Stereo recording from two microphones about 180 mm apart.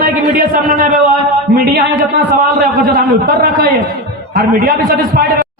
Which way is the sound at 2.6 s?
55° right (ahead or behind).